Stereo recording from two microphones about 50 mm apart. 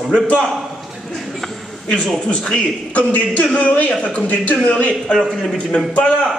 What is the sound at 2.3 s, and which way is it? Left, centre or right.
A man's voice, left.